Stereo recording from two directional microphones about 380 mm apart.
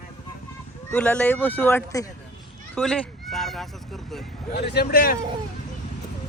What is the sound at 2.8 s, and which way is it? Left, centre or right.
Fowl, centre.